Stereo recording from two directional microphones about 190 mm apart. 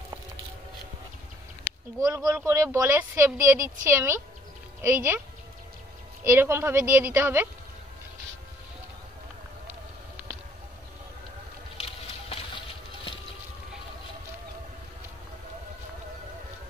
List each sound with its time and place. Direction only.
2.0 s speech: 20° right (ahead or behind)
6.2 s speech: 15° right (ahead or behind)
11.7 s a sound: 30° left (ahead or behind)